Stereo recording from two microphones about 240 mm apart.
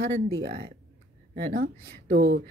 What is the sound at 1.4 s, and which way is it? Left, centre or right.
Speech, right.